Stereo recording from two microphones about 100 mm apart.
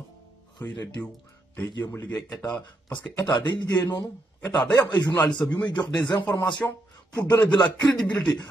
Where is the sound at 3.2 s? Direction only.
45° left (ahead or behind).